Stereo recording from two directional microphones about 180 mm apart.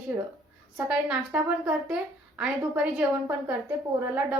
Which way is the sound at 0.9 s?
5° right (ahead or behind).